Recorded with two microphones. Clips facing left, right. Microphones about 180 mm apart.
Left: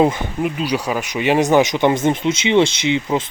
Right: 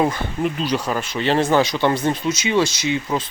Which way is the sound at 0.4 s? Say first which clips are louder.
Left 1 dB; 10° left (ahead or behind).